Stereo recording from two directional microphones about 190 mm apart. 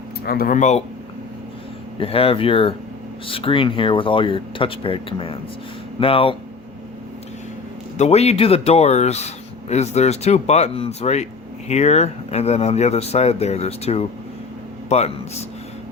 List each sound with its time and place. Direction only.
0.3 s speech: 50° left (ahead or behind)
2.0 s speech: 30° left (ahead or behind)
7.9 s a man's voice: 35° left (ahead or behind)